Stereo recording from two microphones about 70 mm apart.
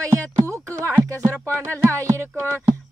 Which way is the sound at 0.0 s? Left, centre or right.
Right.